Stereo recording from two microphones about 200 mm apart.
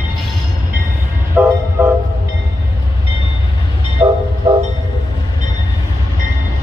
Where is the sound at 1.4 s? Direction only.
10° right (ahead or behind).